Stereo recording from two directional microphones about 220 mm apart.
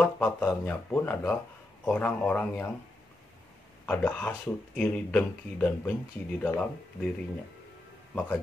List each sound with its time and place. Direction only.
0.0 s speech: 10° left (ahead or behind)
3.8 s speech: 5° left (ahead or behind)